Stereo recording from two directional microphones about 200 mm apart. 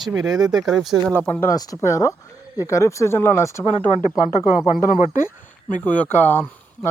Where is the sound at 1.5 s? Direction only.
20° left (ahead or behind).